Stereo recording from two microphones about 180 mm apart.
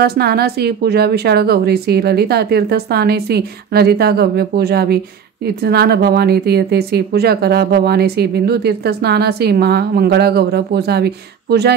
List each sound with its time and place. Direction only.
0.0 s a woman's voice: 60° right (ahead or behind)